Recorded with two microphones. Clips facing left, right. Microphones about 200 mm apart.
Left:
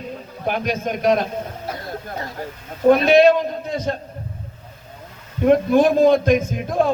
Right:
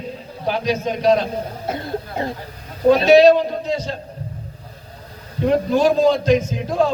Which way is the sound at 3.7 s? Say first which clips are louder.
Even; 55° left (ahead or behind).